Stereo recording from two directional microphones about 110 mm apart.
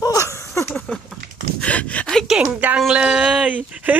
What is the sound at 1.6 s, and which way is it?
Gasp, 10° left (ahead or behind).